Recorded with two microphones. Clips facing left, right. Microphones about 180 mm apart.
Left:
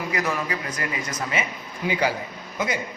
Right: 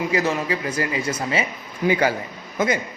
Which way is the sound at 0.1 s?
30° right (ahead or behind).